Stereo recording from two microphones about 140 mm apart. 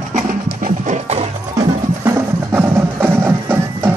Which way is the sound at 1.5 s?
25° right (ahead or behind).